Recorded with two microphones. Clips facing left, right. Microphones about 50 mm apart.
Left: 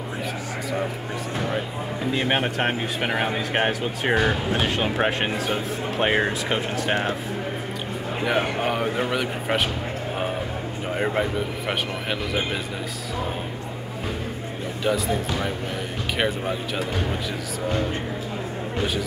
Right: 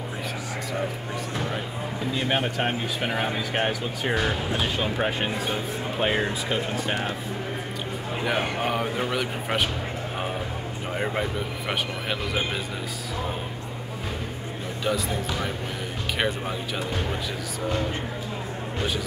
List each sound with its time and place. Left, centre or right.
2.1 s speech: left
8.3 s speech: centre
10.9 s speech: centre
14.8 s speech: centre
16.2 s speech: centre